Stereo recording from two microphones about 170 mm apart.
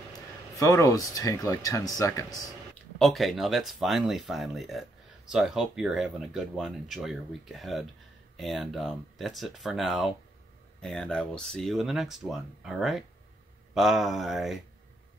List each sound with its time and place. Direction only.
0.6 s speech: 20° left (ahead or behind)
3.0 s speech: centre (ahead or behind)